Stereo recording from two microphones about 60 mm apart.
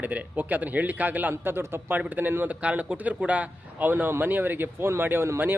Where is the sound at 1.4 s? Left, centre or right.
Right.